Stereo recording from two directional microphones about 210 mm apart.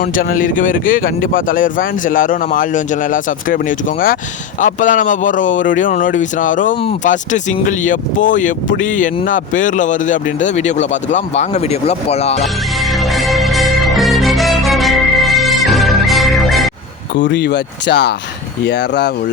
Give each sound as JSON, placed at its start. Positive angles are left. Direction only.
{"t": 0.0, "sound": "speech", "side_deg": 40}
{"t": 12.8, "sound": "music", "side_deg": 0}
{"t": 17.2, "sound": "speech", "side_deg": 55}